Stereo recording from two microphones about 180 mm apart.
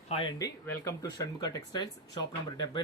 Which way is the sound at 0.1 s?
30° left (ahead or behind).